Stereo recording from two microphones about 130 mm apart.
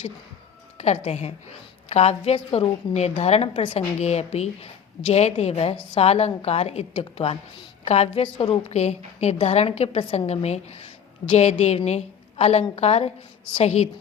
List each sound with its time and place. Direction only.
0.8 s a woman's voice: 55° left (ahead or behind)
4.0 s a woman's voice: 55° left (ahead or behind)